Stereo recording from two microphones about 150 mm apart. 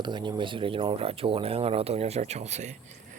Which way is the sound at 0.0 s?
30° right (ahead or behind).